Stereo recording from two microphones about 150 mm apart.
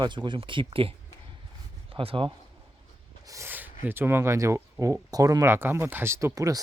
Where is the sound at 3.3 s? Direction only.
15° right (ahead or behind).